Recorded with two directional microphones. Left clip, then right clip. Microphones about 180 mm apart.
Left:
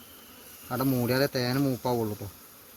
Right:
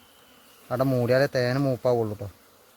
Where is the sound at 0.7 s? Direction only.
80° right.